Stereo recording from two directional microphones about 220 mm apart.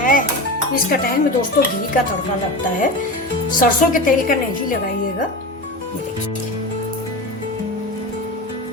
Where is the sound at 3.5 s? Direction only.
40° left (ahead or behind).